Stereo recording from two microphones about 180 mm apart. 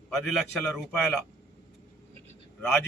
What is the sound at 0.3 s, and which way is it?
Speech, centre (ahead or behind).